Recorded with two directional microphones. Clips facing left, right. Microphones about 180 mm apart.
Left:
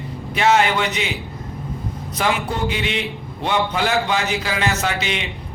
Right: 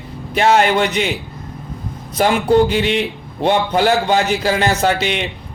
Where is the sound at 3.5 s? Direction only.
40° right (ahead or behind).